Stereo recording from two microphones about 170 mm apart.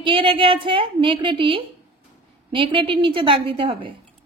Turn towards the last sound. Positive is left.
turn(degrees=-30)  # may be behind; listen again after turning